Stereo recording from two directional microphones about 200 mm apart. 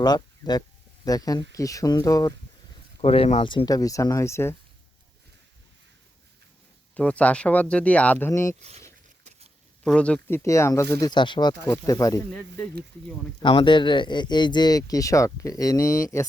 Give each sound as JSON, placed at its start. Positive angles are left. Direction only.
{"t": 0.0, "sound": "speech", "side_deg": 20}
{"t": 3.0, "sound": "speech", "side_deg": 30}
{"t": 6.9, "sound": "speech", "side_deg": 5}
{"t": 9.8, "sound": "speech", "side_deg": 5}
{"t": 13.4, "sound": "speech", "side_deg": 25}